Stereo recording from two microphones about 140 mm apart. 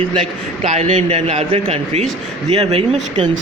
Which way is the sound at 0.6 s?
50° right (ahead or behind).